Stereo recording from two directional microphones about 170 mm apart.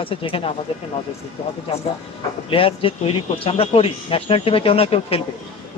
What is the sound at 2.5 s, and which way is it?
Speech, 35° left (ahead or behind).